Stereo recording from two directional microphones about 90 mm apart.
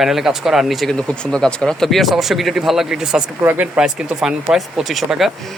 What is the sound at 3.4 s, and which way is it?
Speech, 25° right (ahead or behind).